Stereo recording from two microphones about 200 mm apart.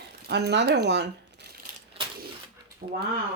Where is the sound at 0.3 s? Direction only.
55° right (ahead or behind).